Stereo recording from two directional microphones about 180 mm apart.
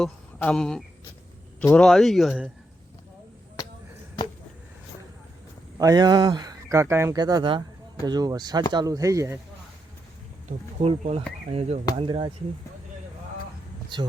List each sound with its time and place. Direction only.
0.0 s speech: 5° left (ahead or behind)
5.7 s speech: 20° right (ahead or behind)
10.8 s speech: 35° right (ahead or behind)